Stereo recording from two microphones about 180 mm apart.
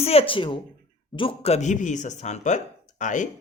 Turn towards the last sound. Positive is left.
turn(degrees=45)  # may be behind; listen again after turning